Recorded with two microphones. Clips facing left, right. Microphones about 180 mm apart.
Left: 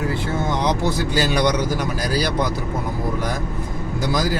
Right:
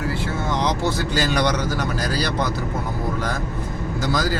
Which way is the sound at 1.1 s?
10° left (ahead or behind).